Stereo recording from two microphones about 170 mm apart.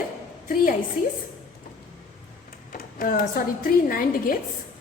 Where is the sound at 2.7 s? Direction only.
55° left (ahead or behind).